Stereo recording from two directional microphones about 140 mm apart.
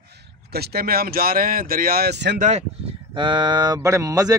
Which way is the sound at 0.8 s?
90° right.